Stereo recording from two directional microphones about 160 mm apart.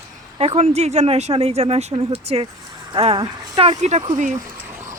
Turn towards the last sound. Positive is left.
turn(degrees=-50)  # may be behind; listen again after turning